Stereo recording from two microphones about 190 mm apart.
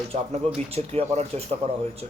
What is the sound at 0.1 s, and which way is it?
Speech, 30° right (ahead or behind).